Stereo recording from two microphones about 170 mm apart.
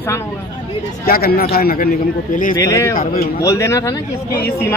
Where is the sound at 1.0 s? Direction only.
65° left (ahead or behind).